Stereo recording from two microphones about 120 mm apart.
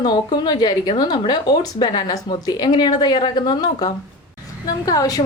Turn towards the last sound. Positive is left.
turn(degrees=30)  # may be behind; listen again after turning